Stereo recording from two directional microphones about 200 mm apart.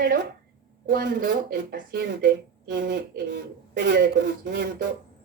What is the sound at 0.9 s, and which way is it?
Speech, 50° right (ahead or behind).